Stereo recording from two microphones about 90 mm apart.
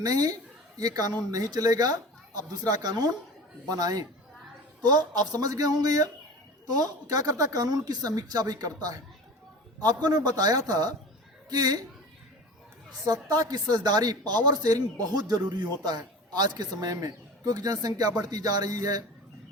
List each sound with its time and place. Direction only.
0.0 s a woman's voice: 40° right (ahead or behind)
13.1 s a woman's voice: 45° right (ahead or behind)